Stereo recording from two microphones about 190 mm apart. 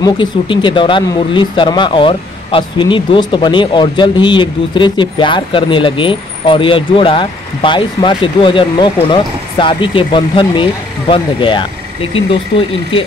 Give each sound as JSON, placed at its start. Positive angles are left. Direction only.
{"t": 0.0, "sound": "speech", "side_deg": 25}